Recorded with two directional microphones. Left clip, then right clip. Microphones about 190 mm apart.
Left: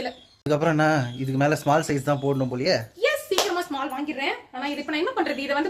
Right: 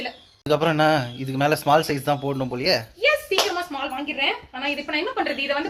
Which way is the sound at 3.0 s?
25° left (ahead or behind).